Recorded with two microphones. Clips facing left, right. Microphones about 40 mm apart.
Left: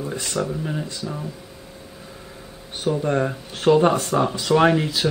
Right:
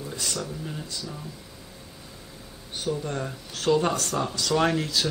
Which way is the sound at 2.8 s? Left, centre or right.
Left.